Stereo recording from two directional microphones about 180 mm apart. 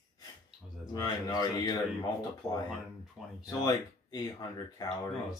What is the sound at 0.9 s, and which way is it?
Speech, 20° left (ahead or behind).